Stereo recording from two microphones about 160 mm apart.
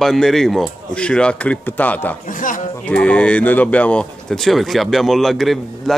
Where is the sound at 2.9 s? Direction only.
5° left (ahead or behind).